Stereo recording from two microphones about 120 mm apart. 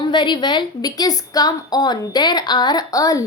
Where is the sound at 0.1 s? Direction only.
40° left (ahead or behind).